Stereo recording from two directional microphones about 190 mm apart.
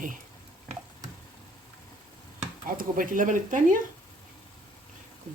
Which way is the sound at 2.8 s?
45° right (ahead or behind).